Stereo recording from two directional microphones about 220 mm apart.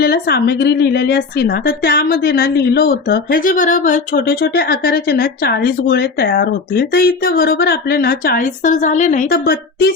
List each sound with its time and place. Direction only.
0.0 s a woman's voice: 45° left (ahead or behind)